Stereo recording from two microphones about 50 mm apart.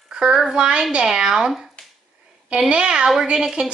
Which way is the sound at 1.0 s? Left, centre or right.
Centre.